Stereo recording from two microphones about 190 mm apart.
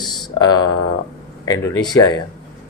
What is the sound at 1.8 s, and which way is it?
Speech, 20° left (ahead or behind).